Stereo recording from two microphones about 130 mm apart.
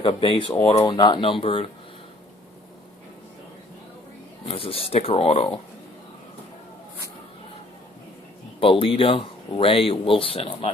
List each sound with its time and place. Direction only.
0.0 s speech: 45° left (ahead or behind)
0.9 s speech: 35° left (ahead or behind)
4.4 s speech: 45° left (ahead or behind)
8.6 s speech: 45° left (ahead or behind)